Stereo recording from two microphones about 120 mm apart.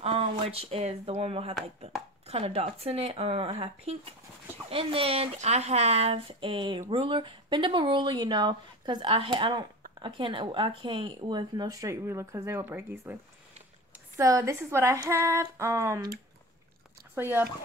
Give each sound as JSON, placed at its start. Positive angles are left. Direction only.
{"t": 0.0, "sound": "speech", "side_deg": -55}
{"t": 17.1, "sound": "speech", "side_deg": -20}